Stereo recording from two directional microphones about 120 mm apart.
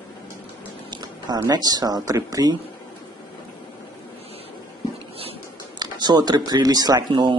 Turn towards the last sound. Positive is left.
turn(degrees=-40)  # may be behind; listen again after turning